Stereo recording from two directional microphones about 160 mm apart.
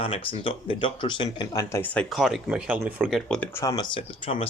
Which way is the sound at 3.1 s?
5° left (ahead or behind).